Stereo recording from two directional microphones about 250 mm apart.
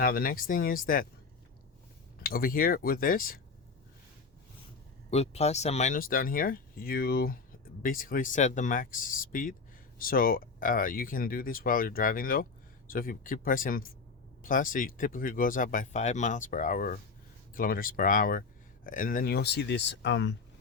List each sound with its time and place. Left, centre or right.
0.0 s speech: left
2.2 s speech: left
5.1 s speech: left